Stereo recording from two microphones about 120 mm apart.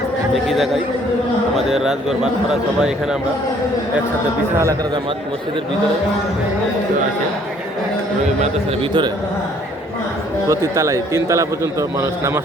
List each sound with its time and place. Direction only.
0.4 s a man's voice: centre (ahead or behind)
8.8 s a man's voice: 40° right (ahead or behind)
10.5 s a man's voice: 25° right (ahead or behind)